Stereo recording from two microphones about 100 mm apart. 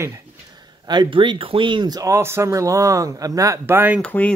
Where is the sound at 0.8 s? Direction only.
50° right (ahead or behind).